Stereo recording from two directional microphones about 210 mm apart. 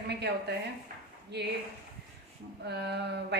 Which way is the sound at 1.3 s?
50° right (ahead or behind).